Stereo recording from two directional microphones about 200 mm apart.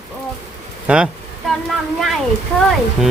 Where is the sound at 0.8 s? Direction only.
5° right (ahead or behind).